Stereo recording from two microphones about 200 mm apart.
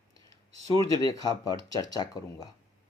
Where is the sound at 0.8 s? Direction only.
15° left (ahead or behind).